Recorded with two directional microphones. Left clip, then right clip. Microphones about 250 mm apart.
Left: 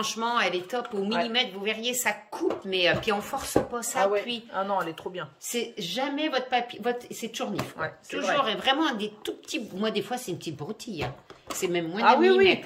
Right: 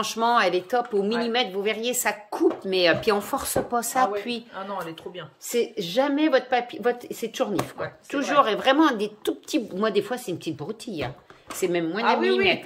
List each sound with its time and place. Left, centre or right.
0.0 s speech: right
4.6 s speech: left
5.5 s a woman's voice: centre
12.0 s speech: left